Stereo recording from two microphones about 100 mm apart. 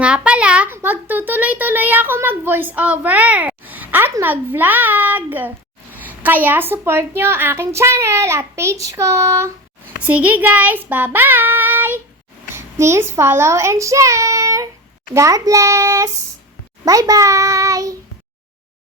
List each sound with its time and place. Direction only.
0.0 s a sound: 10° right (ahead or behind)
0.7 s a woman's voice: 20° right (ahead or behind)
10.1 s a woman's voice: 15° right (ahead or behind); by 17.9 s 35° right (ahead or behind)